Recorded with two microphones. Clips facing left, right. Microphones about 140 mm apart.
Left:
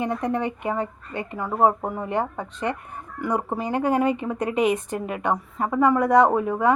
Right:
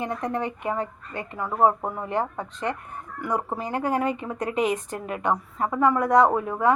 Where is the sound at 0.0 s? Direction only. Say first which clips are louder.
Left 3 dB; 15° left (ahead or behind).